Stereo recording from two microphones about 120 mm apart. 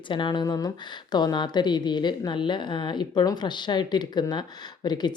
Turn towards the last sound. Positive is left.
turn(degrees=35)  # may be behind; listen again after turning